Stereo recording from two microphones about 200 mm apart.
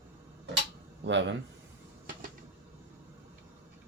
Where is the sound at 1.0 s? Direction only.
65° right (ahead or behind).